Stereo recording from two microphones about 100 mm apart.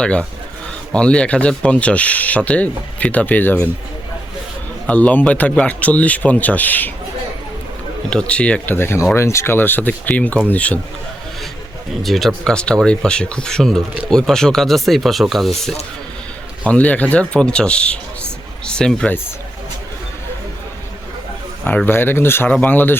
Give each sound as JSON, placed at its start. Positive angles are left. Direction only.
{"t": 0.0, "sound": "speech", "side_deg": 10}
{"t": 4.9, "sound": "speech", "side_deg": 15}
{"t": 8.1, "sound": "speech", "side_deg": 10}
{"t": 12.0, "sound": "speech", "side_deg": 0}
{"t": 16.6, "sound": "speech", "side_deg": 15}
{"t": 21.6, "sound": "speech", "side_deg": 15}